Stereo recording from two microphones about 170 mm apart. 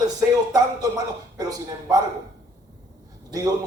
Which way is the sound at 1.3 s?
20° right (ahead or behind).